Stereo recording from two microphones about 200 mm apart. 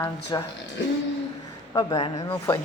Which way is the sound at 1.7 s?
20° left (ahead or behind).